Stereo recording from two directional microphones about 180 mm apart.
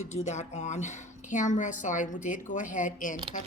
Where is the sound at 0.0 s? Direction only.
35° left (ahead or behind).